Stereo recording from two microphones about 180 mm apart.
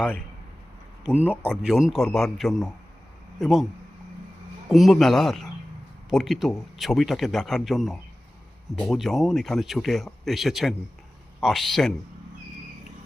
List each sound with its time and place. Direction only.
1.0 s speech: 10° right (ahead or behind)
4.7 s speech: centre (ahead or behind)